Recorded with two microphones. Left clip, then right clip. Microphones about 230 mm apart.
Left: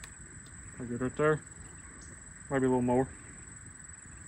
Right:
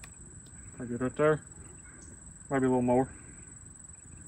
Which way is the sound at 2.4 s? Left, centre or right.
Centre.